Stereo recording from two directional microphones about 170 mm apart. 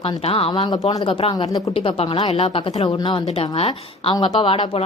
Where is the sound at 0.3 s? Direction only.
35° left (ahead or behind).